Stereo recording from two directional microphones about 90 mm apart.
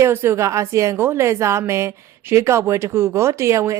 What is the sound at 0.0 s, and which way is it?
A woman's voice, 25° right (ahead or behind).